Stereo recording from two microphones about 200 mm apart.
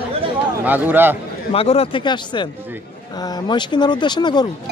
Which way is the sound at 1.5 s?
30° left (ahead or behind).